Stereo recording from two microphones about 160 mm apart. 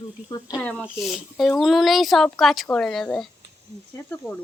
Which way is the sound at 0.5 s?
10° left (ahead or behind).